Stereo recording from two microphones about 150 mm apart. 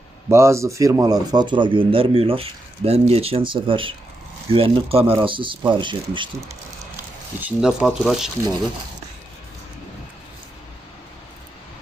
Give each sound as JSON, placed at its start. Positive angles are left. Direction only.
{"t": 0.3, "sound": "a man's voice", "side_deg": -20}
{"t": 7.3, "sound": "speech", "side_deg": -10}